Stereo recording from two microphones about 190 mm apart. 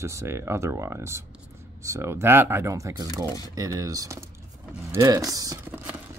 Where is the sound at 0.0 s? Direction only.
15° right (ahead or behind).